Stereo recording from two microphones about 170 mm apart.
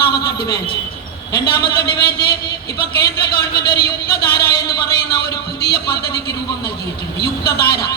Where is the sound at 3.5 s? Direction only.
65° left (ahead or behind).